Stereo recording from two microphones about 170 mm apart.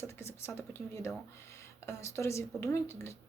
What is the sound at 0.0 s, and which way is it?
Speech, 15° left (ahead or behind).